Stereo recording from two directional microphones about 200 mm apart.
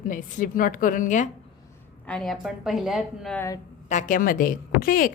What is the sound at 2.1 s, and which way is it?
A woman's voice, 5° left (ahead or behind).